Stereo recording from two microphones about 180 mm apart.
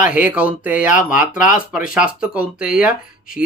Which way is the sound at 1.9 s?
5° right (ahead or behind).